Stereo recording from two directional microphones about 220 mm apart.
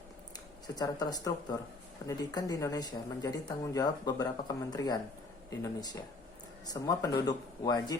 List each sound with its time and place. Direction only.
0.8 s speech: 15° left (ahead or behind)